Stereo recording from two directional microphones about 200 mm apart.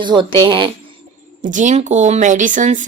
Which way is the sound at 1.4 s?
40° right (ahead or behind).